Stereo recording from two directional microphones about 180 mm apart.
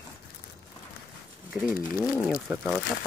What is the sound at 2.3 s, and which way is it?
Speech, 5° right (ahead or behind).